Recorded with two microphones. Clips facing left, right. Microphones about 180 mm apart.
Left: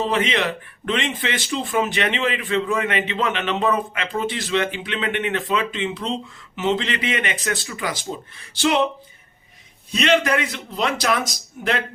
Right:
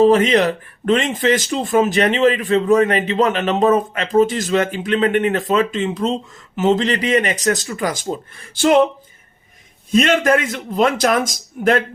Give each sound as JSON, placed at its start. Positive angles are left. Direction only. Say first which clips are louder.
{"t": 0.0, "sound": "speech", "louder": "right 9 dB", "side_deg": -40}
{"t": 9.9, "sound": "a man's voice", "louder": "right 5 dB", "side_deg": -45}